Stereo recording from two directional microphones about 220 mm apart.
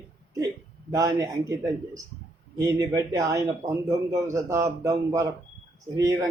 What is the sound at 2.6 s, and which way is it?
Speech, 15° right (ahead or behind).